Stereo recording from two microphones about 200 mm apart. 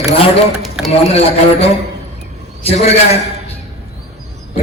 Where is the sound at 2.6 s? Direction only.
30° left (ahead or behind).